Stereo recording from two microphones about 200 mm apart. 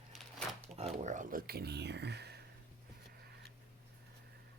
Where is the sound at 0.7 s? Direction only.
30° right (ahead or behind); by 2.4 s 55° right (ahead or behind).